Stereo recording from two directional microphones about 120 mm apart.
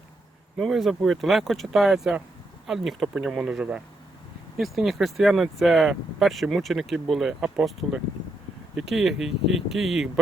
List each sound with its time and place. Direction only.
0.6 s speech: centre (ahead or behind)